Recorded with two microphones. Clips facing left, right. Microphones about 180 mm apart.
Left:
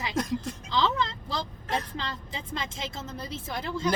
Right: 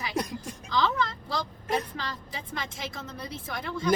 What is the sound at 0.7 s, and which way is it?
Speech, 25° left (ahead or behind).